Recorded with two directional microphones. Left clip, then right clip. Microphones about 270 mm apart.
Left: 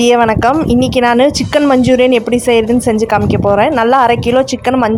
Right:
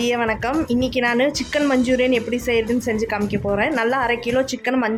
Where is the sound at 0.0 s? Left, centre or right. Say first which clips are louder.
Left 12 dB; left.